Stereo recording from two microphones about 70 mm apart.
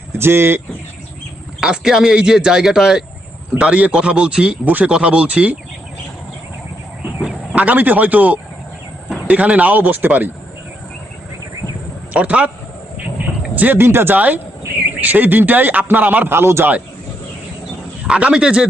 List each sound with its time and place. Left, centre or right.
0.2 s speech: right
1.6 s speech: centre
7.5 s speech: right
12.1 s speech: centre
13.6 s speech: right
14.2 s speech: right
18.0 s speech: centre